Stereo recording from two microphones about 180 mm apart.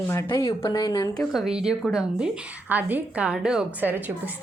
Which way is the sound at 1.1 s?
Centre (ahead or behind).